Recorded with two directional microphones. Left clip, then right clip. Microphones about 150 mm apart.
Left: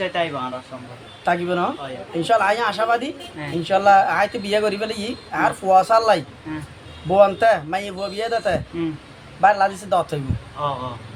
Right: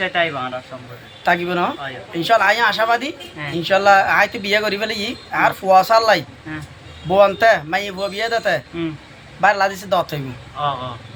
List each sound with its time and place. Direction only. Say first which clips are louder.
0.0 s speech: right 4 dB; 25° left (ahead or behind)
1.2 s speech: right 3 dB; 5° right (ahead or behind)